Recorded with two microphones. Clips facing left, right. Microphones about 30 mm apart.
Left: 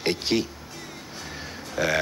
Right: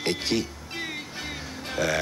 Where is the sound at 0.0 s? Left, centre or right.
Centre.